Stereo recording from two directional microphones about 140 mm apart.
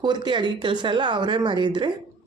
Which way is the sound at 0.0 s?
35° right (ahead or behind).